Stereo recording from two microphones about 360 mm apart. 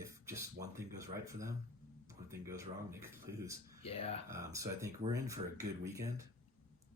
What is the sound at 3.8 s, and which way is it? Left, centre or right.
Speech, centre.